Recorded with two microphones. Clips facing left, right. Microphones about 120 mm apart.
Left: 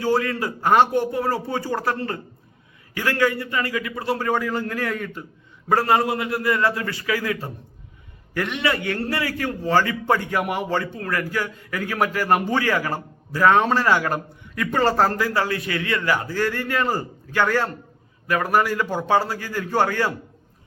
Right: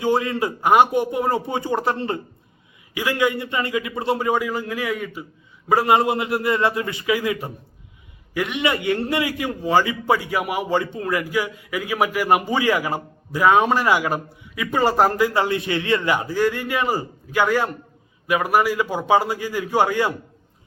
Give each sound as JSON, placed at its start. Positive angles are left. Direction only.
{"t": 0.0, "sound": "a man's voice", "side_deg": -20}